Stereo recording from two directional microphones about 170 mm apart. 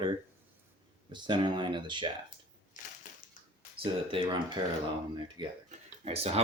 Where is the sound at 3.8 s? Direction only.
30° right (ahead or behind).